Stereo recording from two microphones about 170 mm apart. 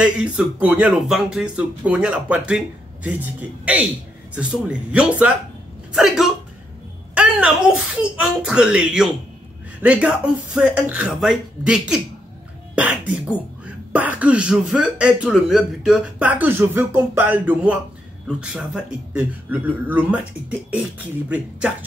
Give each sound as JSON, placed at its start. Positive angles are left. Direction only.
{"t": 0.0, "sound": "speech", "side_deg": -5}